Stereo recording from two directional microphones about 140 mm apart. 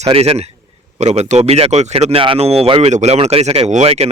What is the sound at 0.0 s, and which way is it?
Speech, 45° right (ahead or behind).